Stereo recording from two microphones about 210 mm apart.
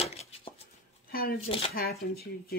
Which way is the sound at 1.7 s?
45° left (ahead or behind).